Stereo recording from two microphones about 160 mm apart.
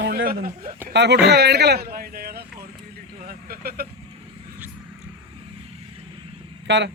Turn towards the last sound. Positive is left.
turn(degrees=-90)